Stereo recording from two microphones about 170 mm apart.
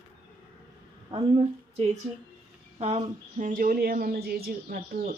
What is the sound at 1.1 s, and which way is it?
A woman's voice, 35° right (ahead or behind).